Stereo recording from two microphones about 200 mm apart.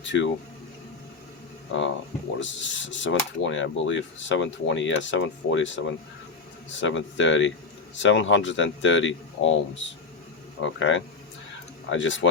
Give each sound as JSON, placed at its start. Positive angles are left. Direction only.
{"t": 0.0, "sound": "speech", "side_deg": 65}
{"t": 1.7, "sound": "speech", "side_deg": 65}